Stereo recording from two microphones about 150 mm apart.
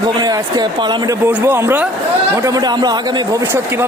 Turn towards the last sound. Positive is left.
turn(degrees=-25)  # may be behind; listen again after turning